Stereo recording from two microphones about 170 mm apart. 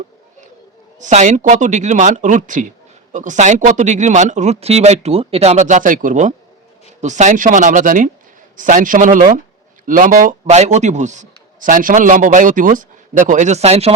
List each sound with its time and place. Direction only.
0.9 s a man's voice: 45° right (ahead or behind)